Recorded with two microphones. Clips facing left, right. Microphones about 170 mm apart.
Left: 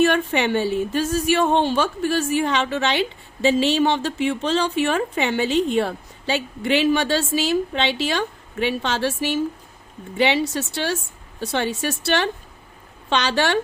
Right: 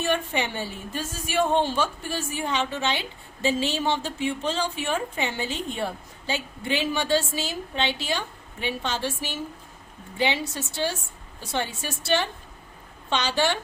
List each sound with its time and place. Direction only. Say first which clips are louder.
0.0 s a woman's voice: left 7 dB; 75° left (ahead or behind)